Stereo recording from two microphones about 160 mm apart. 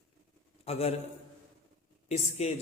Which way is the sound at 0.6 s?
40° left (ahead or behind).